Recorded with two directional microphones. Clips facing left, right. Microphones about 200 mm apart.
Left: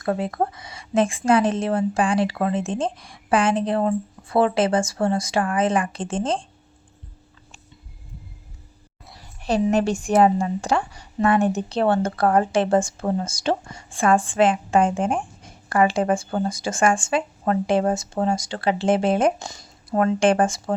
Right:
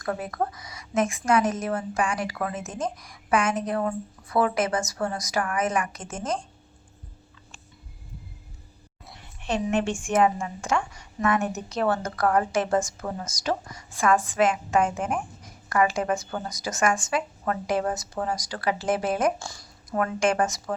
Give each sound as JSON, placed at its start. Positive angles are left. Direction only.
{"t": 0.0, "sound": "a woman's voice", "side_deg": 25}
{"t": 9.1, "sound": "a woman's voice", "side_deg": 35}